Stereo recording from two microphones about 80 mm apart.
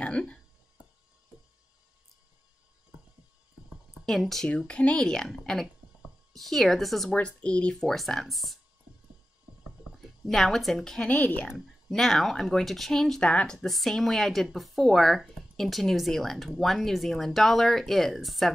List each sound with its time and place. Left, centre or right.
0.0 s a sound: centre
4.0 s a woman's voice: centre
7.1 s a woman's voice: centre
7.7 s speech: centre
10.2 s speech: centre
11.1 s speech: centre
11.4 s speech: centre